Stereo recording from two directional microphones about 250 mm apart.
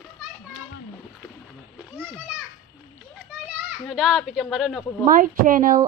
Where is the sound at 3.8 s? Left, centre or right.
Centre.